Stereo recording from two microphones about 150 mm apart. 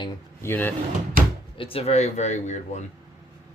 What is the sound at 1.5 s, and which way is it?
Speech, 40° left (ahead or behind).